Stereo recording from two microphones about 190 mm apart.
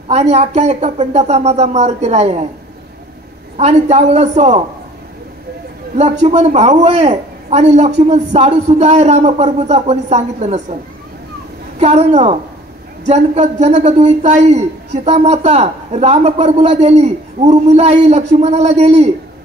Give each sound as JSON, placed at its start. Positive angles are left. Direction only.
{"t": 0.1, "sound": "a man's voice", "side_deg": -35}
{"t": 3.5, "sound": "a man's voice", "side_deg": -35}
{"t": 6.2, "sound": "a man's voice", "side_deg": -35}
{"t": 11.8, "sound": "a man's voice", "side_deg": -35}